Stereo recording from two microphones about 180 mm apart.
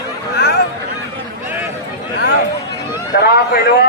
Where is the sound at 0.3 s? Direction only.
70° left (ahead or behind).